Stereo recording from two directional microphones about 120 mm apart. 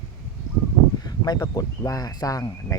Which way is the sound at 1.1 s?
35° left (ahead or behind).